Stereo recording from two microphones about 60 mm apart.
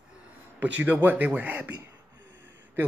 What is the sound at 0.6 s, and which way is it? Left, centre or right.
Speech, right.